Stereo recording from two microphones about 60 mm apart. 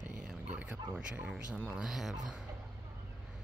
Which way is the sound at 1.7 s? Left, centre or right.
Centre.